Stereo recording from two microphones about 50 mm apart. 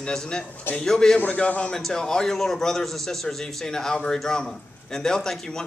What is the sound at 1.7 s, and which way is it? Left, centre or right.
A man's voice, centre.